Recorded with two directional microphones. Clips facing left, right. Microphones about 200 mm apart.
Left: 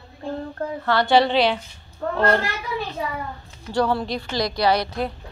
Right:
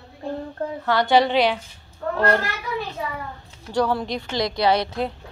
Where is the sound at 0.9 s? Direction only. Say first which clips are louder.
Even; 15° right (ahead or behind).